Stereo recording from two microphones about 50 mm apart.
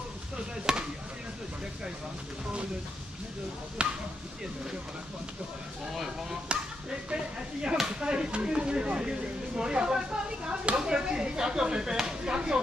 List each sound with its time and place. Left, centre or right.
0.7 s speech: centre
3.8 s speech: right
6.5 s chop: right
8.0 s speech: centre